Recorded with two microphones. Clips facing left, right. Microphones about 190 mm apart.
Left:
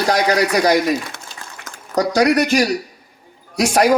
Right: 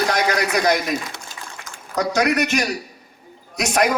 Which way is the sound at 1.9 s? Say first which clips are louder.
Left 4 dB; 35° left (ahead or behind).